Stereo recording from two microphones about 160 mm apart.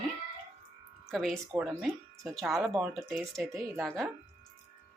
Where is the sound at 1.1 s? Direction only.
5° left (ahead or behind).